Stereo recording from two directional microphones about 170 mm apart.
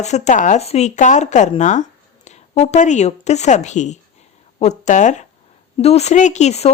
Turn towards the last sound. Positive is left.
turn(degrees=40)  # may be behind; listen again after turning